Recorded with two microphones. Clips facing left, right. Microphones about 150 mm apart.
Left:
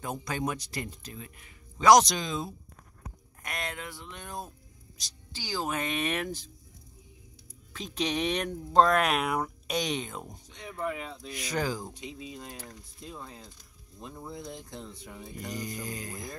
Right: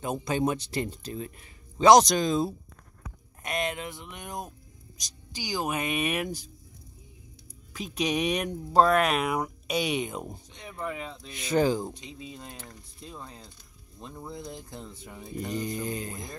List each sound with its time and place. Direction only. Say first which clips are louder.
0.0 s speech: right 5 dB; 20° right (ahead or behind)
2.0 s speech: right 8 dB; 45° right (ahead or behind)
3.4 s speech: right 6 dB; 20° right (ahead or behind)
7.7 s speech: right 3 dB; 10° right (ahead or behind)
10.8 s speech: left 1 dB; 5° left (ahead or behind)
11.2 s speech: right 8 dB; 25° right (ahead or behind)
11.9 s speech: left 1 dB; 5° left (ahead or behind)
15.3 s speech: right 6 dB; 25° right (ahead or behind)